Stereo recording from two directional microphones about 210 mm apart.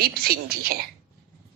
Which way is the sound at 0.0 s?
45° right (ahead or behind).